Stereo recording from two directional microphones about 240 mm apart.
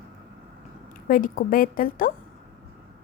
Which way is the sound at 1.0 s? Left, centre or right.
Left.